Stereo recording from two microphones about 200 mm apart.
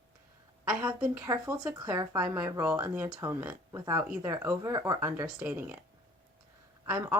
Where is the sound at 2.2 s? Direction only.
10° right (ahead or behind).